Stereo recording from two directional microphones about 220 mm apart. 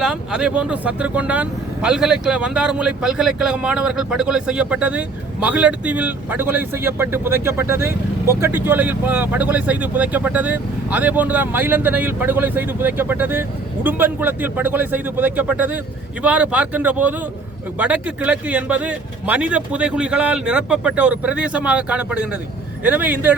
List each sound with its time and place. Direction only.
0.0 s a man's voice: 5° right (ahead or behind)